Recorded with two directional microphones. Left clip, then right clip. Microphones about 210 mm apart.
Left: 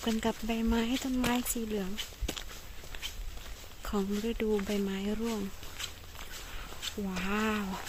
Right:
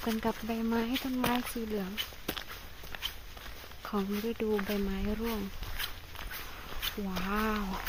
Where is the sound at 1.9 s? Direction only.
45° right (ahead or behind).